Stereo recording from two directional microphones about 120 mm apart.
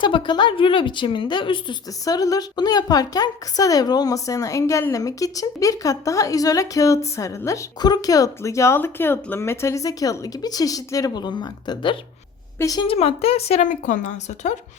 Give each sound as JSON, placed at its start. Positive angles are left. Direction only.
{"t": 0.0, "sound": "a woman's voice", "side_deg": 40}
{"t": 2.0, "sound": "a woman's voice", "side_deg": 30}
{"t": 12.5, "sound": "a woman's voice", "side_deg": 30}
{"t": 12.9, "sound": "speech", "side_deg": 55}